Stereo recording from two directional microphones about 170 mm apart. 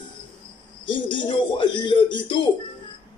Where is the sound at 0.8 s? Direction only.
30° left (ahead or behind).